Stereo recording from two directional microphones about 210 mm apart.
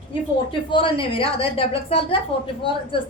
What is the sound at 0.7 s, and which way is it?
A woman's voice, 25° left (ahead or behind).